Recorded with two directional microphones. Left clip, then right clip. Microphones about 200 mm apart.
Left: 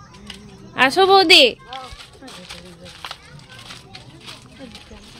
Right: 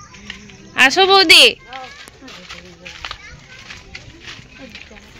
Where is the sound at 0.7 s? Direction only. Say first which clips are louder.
Right 2 dB; 10° left (ahead or behind).